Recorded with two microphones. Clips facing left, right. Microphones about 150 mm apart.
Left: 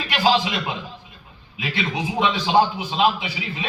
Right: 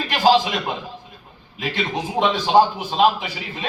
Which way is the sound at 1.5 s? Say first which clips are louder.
Right 1 dB; 45° right (ahead or behind).